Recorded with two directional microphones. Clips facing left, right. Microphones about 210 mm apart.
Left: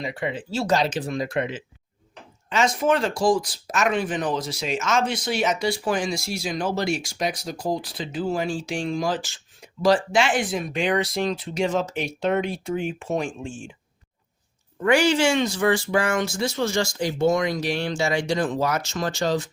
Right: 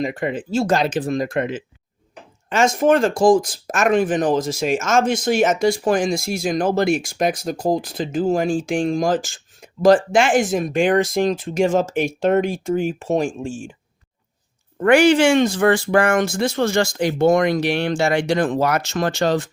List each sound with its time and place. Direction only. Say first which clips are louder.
0.0 s speech: right 6 dB; 45° right (ahead or behind)
14.8 s speech: right 6 dB; 55° right (ahead or behind)